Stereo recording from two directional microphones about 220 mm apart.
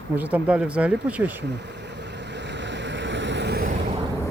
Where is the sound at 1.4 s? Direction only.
50° right (ahead or behind).